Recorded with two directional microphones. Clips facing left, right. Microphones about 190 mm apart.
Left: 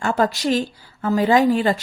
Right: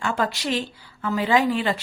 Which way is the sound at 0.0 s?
40° left (ahead or behind).